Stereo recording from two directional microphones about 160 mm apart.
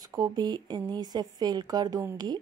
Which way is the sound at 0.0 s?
25° right (ahead or behind).